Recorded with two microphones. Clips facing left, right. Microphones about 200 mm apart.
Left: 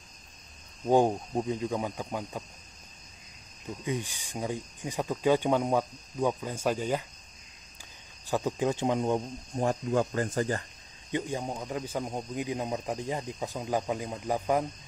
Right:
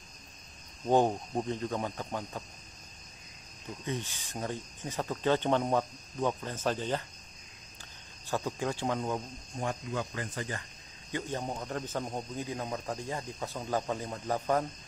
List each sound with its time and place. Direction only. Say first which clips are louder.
0.8 s speech: left 2 dB; 10° left (ahead or behind)
3.8 s speech: left 3 dB; 15° left (ahead or behind)
8.3 s speech: left 5 dB; 15° left (ahead or behind); by 10.6 s 45° left (ahead or behind)
11.1 s speech: left 3 dB; 15° left (ahead or behind)